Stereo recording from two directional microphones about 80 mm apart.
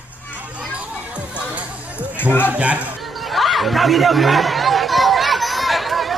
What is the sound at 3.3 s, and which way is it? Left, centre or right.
Speech, centre.